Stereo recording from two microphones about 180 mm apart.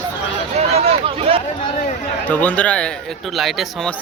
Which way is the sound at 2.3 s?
5° left (ahead or behind).